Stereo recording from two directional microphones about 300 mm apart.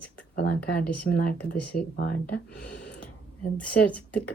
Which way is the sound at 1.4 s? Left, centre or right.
Centre.